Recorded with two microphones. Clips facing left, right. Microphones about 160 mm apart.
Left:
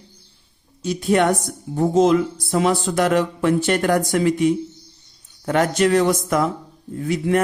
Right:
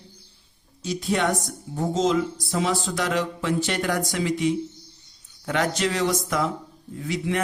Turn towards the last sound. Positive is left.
turn(degrees=50)  # may be behind; listen again after turning